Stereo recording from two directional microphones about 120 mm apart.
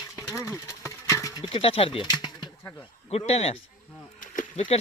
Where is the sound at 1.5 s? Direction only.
50° left (ahead or behind).